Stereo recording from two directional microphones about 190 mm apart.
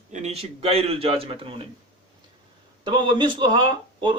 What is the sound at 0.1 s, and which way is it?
A man's voice, 35° right (ahead or behind).